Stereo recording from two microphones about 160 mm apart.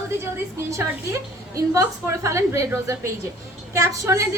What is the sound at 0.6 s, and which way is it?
A woman's voice, 20° right (ahead or behind).